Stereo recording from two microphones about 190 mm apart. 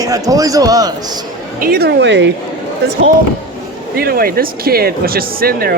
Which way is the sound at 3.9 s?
55° right (ahead or behind).